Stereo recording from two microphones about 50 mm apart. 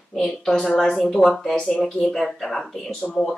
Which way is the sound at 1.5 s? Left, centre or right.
Left.